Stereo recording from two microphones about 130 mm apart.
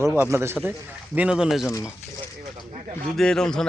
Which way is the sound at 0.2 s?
20° right (ahead or behind).